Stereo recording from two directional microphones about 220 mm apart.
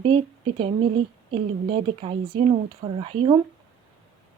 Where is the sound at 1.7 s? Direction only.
25° right (ahead or behind).